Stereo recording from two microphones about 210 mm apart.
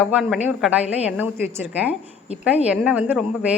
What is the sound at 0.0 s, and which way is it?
A woman's voice, 5° right (ahead or behind).